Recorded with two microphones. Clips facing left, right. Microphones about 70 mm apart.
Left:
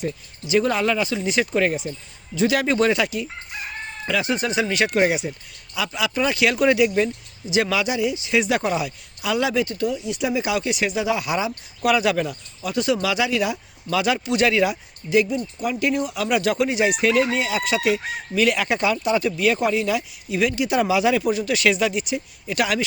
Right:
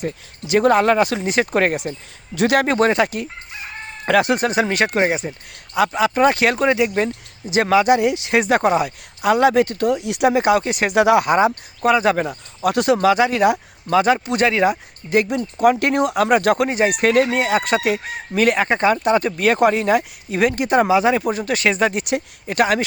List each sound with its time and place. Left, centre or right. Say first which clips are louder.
0.0 s speech: right 2 dB; right
4.9 s speech: left 2 dB; right
5.7 s speech: right 7 dB; right
6.7 s speech: even; right
7.9 s speech: right 4 dB; right
11.3 s speech: right 8 dB; right
11.9 s speech: right 3 dB; right
12.6 s speech: right 7 dB; right
15.3 s speech: right 9 dB; right
22.0 s speech: right 5 dB; right
22.5 s speech: right 5 dB; right